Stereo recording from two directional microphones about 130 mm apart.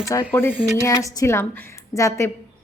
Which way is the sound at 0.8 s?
25° left (ahead or behind).